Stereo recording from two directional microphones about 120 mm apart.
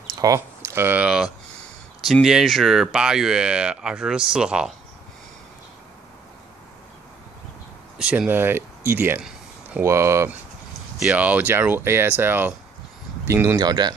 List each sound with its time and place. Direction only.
0.2 s speech: 25° right (ahead or behind); by 4.7 s 5° right (ahead or behind)
8.0 s speech: 10° right (ahead or behind)
11.0 s speech: 10° right (ahead or behind)
13.6 s speech: 35° right (ahead or behind)